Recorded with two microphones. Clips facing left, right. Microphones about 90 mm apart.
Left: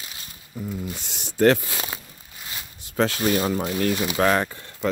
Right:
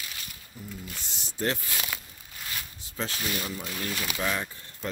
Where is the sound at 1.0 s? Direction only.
70° left (ahead or behind).